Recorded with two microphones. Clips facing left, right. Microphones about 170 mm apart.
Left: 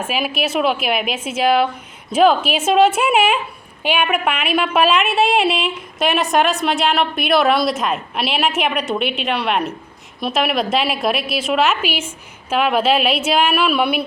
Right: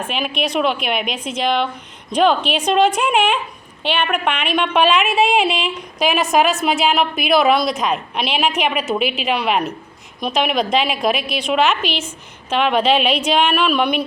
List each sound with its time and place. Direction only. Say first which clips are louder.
0.0 s a woman's voice: left 1 dB; 5° left (ahead or behind)